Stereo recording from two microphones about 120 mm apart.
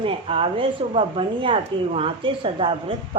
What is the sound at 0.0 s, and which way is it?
Speech, 50° right (ahead or behind).